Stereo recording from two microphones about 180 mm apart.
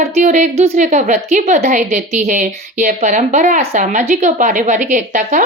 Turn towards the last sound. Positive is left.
turn(degrees=-45)  # may be behind; listen again after turning